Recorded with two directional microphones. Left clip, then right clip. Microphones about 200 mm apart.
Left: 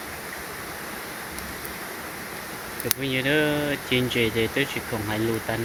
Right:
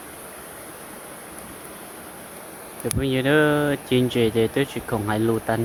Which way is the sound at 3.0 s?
25° right (ahead or behind).